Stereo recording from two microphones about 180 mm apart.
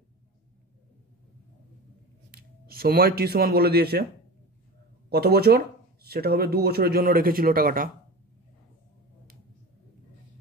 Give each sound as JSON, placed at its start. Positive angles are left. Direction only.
{"t": 2.3, "sound": "speech", "side_deg": -55}
{"t": 5.1, "sound": "speech", "side_deg": -60}